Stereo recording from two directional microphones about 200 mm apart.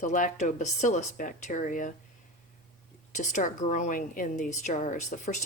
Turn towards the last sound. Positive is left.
turn(degrees=35)  # may be behind; listen again after turning